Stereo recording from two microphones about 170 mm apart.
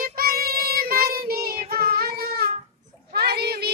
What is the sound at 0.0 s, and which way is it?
Child singing, 60° right (ahead or behind).